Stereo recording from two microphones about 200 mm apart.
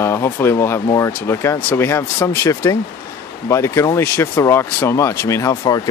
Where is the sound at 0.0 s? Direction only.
10° left (ahead or behind).